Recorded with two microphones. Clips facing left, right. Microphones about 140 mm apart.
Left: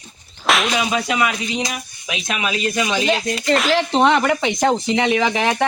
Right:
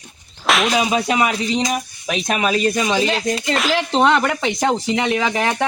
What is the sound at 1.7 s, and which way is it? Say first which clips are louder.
Speech: right 6 dB; 40° right (ahead or behind).